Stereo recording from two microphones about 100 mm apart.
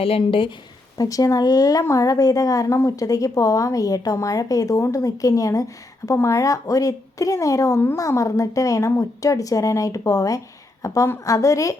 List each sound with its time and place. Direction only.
0.0 s a woman's voice: 65° left (ahead or behind)
0.9 s a woman's voice: 35° left (ahead or behind)